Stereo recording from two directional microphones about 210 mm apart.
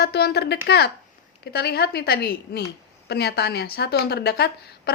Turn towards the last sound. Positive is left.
turn(degrees=50)  # may be behind; listen again after turning